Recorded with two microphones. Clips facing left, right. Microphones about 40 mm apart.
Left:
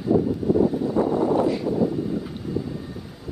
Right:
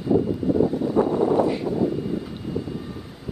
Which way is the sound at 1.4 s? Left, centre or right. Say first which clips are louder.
Left 1 dB; centre.